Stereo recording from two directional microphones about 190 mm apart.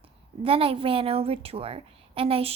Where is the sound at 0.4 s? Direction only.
30° right (ahead or behind).